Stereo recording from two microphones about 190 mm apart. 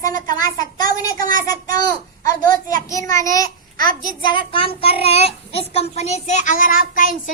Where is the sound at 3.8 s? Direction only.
50° right (ahead or behind).